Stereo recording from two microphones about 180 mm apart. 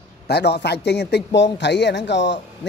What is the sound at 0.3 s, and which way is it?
A man's voice, 70° left (ahead or behind).